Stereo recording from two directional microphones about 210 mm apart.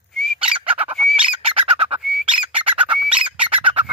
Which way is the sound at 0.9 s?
Centre (ahead or behind).